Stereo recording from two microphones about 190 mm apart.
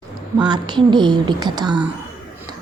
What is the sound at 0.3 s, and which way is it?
Speech, 20° right (ahead or behind).